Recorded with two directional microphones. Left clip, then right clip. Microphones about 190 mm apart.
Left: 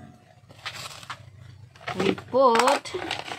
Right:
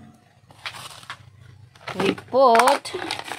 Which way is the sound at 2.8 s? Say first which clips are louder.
Right 2 dB; 60° right (ahead or behind).